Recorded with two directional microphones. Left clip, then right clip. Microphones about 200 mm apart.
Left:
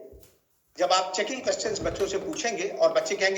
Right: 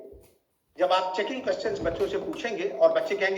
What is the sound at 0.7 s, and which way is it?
Speech, 30° left (ahead or behind).